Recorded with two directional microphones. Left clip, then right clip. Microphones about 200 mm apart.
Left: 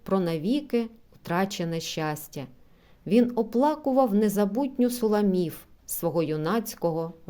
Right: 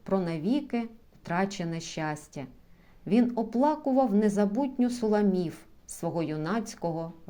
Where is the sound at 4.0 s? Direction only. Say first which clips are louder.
Left 3 dB; 40° left (ahead or behind).